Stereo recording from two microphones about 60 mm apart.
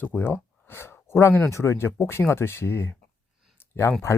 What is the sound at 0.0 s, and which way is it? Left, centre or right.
Speech, left.